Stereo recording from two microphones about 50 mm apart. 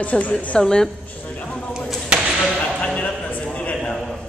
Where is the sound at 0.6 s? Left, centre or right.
Centre.